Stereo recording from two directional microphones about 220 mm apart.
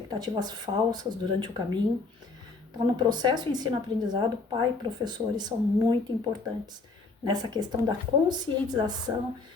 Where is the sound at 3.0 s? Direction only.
20° right (ahead or behind).